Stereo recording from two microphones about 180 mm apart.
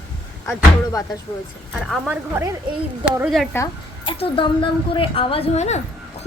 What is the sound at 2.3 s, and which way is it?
Speech, 15° right (ahead or behind).